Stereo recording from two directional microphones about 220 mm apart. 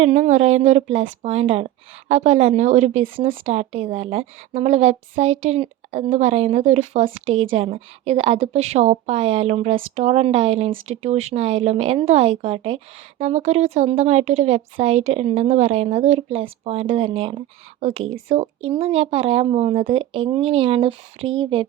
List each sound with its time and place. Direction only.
0.0 s speech: 30° right (ahead or behind)